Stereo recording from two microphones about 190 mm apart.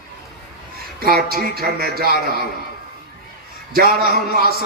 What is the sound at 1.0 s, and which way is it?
A man's voice, 50° right (ahead or behind).